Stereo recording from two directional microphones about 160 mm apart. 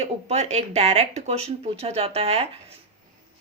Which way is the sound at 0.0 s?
40° right (ahead or behind).